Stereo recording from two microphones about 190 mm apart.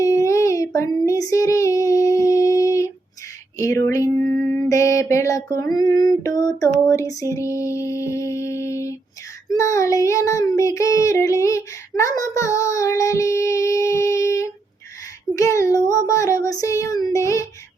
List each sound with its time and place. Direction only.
0.0 s child singing: 15° left (ahead or behind)
3.6 s music: 15° left (ahead or behind)
5.7 s female singing: 20° left (ahead or behind)
6.6 s music: 15° left (ahead or behind)
9.5 s child singing: 15° left (ahead or behind)
15.4 s music: 15° left (ahead or behind)